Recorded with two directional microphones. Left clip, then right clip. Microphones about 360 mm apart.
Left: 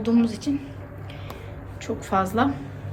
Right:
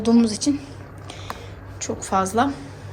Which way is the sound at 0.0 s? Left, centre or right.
Centre.